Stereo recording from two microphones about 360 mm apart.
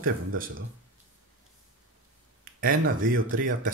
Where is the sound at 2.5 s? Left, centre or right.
Right.